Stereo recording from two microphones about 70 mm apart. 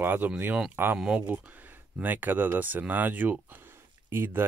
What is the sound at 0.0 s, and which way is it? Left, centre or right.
Speech, right.